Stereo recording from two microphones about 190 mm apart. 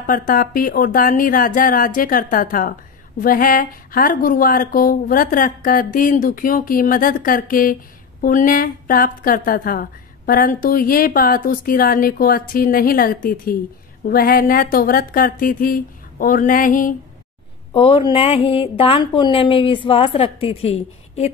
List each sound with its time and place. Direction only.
0.0 s a woman's voice: 45° left (ahead or behind)
17.7 s speech: 30° left (ahead or behind)